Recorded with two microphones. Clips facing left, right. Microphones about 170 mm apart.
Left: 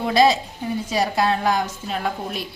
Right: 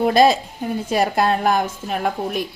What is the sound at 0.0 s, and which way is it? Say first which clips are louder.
A woman's voice: right 3 dB; 50° right (ahead or behind).